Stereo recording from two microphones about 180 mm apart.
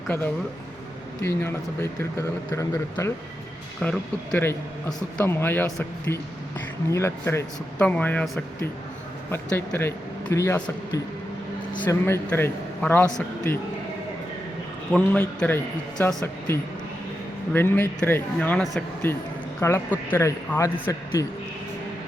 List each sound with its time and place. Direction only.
1.2 s speech: 15° left (ahead or behind)
3.8 s speech: 5° left (ahead or behind)
14.9 s speech: 5° left (ahead or behind)